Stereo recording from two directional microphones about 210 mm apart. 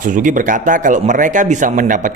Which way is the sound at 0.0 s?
40° right (ahead or behind).